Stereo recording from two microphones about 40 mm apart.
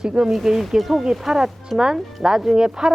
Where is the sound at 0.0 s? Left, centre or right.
Centre.